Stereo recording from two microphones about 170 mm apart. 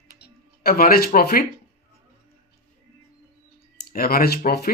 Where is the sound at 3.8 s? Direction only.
60° left (ahead or behind).